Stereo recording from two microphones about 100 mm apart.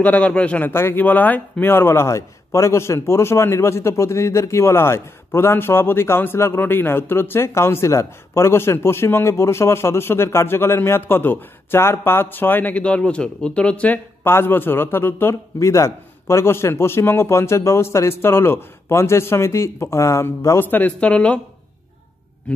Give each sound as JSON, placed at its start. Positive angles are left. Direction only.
{"t": 0.0, "sound": "a man's voice", "side_deg": 15}
{"t": 14.2, "sound": "a man's voice", "side_deg": 25}